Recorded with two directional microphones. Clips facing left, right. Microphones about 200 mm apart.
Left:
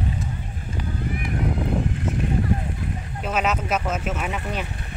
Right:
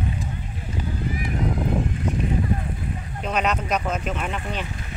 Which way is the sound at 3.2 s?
5° left (ahead or behind).